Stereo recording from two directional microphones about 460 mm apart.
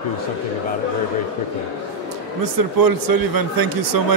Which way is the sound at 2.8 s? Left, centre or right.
Right.